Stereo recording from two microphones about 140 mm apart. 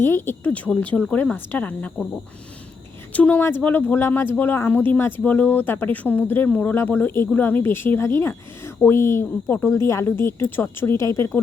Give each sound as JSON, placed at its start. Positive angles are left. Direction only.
{"t": 0.0, "sound": "speech", "side_deg": 15}
{"t": 3.1, "sound": "speech", "side_deg": 10}